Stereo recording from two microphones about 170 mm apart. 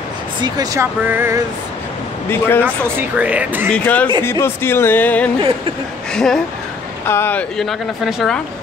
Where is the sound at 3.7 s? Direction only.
10° left (ahead or behind).